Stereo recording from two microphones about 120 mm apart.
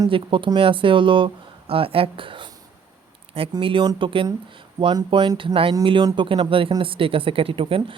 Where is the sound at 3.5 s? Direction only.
45° right (ahead or behind).